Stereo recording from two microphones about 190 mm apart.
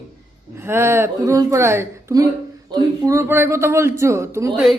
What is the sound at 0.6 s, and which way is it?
Speech, 15° right (ahead or behind).